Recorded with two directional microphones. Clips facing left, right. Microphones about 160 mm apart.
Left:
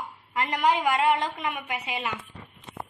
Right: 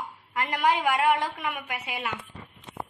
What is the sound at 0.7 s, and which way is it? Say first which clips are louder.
Speech: even; 10° right (ahead or behind).